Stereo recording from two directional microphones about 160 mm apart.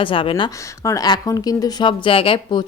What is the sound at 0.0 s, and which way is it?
Speech, 35° left (ahead or behind).